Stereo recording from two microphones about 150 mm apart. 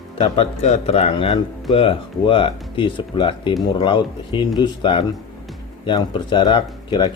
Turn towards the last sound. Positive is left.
turn(degrees=30)  # may be behind; listen again after turning